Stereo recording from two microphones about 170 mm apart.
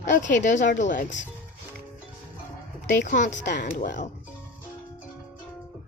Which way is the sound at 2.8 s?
45° left (ahead or behind).